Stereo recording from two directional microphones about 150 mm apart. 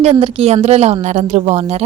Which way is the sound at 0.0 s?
40° right (ahead or behind).